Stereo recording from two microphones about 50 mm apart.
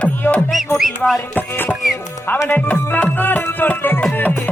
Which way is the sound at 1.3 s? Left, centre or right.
Left.